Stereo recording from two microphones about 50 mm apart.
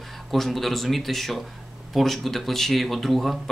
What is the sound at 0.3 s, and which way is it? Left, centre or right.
Speech, centre.